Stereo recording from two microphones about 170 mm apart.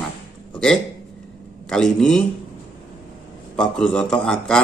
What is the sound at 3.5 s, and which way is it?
Speech, 5° left (ahead or behind).